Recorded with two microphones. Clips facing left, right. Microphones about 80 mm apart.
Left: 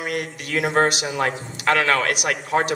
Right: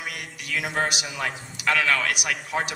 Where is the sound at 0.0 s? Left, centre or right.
Left.